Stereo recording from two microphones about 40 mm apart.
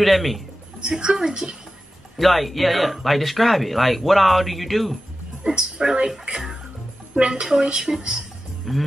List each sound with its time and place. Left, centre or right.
0.0 s speech: centre
0.7 s a woman's voice: right
2.1 s speech: centre
5.4 s speech: centre
7.2 s a woman's voice: right